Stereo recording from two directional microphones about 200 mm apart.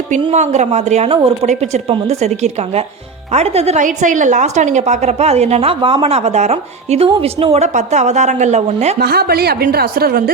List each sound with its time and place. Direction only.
0.1 s a woman's voice: 35° right (ahead or behind)
9.0 s a woman's voice: 50° right (ahead or behind)